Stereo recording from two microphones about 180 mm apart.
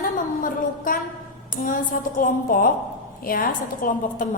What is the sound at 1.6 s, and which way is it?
A woman's voice, 50° left (ahead or behind).